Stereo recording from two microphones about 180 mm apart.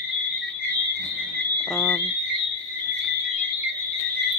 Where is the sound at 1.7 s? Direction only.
Centre (ahead or behind).